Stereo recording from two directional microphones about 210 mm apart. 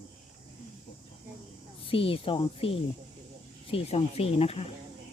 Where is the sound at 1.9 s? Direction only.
25° left (ahead or behind).